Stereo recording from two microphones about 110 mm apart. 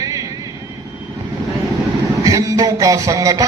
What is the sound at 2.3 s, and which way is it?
Music, 30° right (ahead or behind).